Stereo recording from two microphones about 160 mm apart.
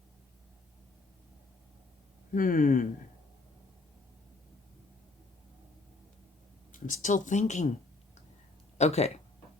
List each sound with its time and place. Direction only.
2.3 s speech: 55° left (ahead or behind)
6.7 s speech: 55° left (ahead or behind)
8.8 s speech: 40° left (ahead or behind)